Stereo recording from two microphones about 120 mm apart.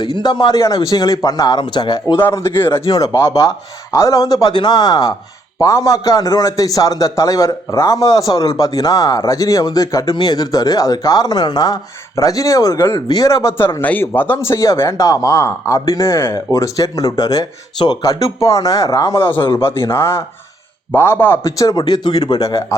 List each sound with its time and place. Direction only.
0.0 s speech: 35° left (ahead or behind)
2.1 s speech: 20° left (ahead or behind)